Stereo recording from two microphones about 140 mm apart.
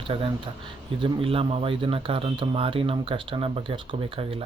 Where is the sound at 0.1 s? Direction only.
35° right (ahead or behind).